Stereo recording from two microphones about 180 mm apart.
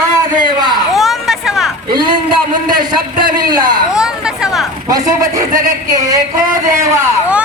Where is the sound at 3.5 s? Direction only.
25° right (ahead or behind).